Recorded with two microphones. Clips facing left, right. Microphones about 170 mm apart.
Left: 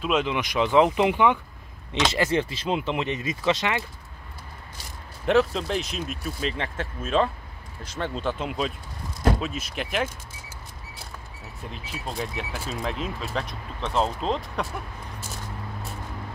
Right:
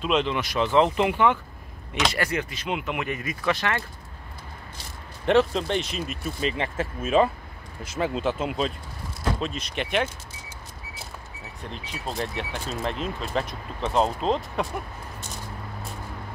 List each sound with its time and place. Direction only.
0.0 s speech: 10° left (ahead or behind)
2.1 s speech: 25° left (ahead or behind)
5.2 s speech: centre (ahead or behind)
11.7 s speech: 5° left (ahead or behind)